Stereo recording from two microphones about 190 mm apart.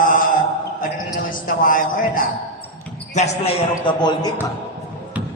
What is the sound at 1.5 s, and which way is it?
Speech, 45° left (ahead or behind).